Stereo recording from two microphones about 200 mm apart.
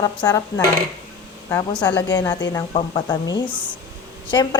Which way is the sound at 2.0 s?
20° left (ahead or behind).